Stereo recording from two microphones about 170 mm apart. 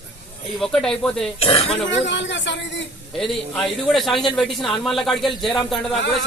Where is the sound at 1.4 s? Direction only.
35° left (ahead or behind).